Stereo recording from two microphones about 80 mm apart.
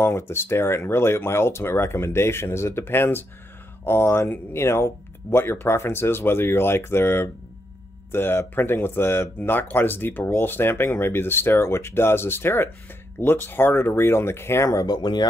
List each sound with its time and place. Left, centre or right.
0.0 s speech: left
14.9 s speech: left